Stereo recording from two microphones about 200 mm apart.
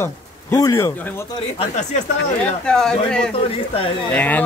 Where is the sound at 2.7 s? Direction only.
5° left (ahead or behind).